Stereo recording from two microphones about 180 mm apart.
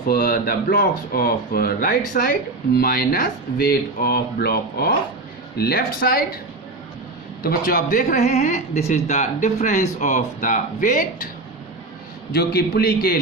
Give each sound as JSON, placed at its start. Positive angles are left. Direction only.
{"t": 0.1, "sound": "speech", "side_deg": 55}
{"t": 7.4, "sound": "speech", "side_deg": 50}
{"t": 12.3, "sound": "speech", "side_deg": 60}